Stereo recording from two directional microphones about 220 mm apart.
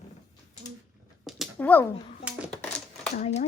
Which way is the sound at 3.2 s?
30° left (ahead or behind).